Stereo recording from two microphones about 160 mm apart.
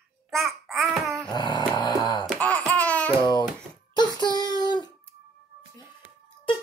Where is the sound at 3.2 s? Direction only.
25° left (ahead or behind).